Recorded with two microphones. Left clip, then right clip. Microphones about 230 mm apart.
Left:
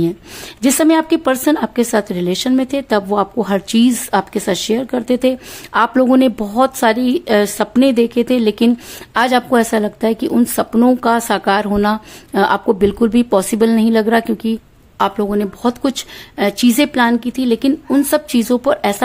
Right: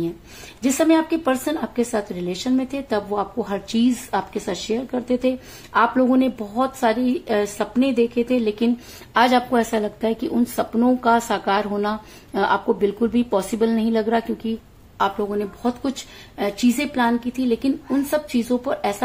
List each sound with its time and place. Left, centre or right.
0.6 s speech: left